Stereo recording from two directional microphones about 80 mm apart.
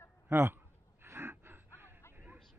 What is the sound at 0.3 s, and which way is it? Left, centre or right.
Speech, right.